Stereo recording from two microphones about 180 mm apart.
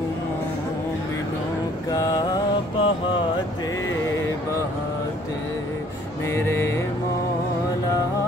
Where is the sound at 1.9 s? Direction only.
20° left (ahead or behind).